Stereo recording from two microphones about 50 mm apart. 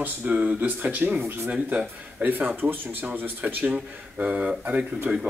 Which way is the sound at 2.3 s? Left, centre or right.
Right.